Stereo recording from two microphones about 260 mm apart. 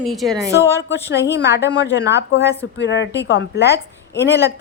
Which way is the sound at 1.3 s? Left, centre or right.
Left.